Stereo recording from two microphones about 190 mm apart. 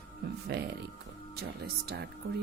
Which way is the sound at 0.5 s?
60° right (ahead or behind).